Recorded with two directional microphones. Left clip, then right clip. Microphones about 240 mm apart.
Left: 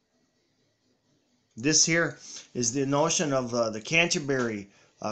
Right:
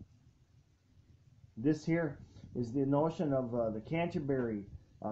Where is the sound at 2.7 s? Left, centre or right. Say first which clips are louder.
Left 6 dB; left.